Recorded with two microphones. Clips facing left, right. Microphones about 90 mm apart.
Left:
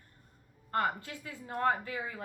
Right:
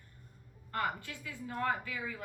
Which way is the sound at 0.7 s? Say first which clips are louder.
Left 4 dB; 35° left (ahead or behind).